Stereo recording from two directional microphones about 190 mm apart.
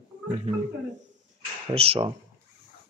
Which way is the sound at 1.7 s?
30° right (ahead or behind).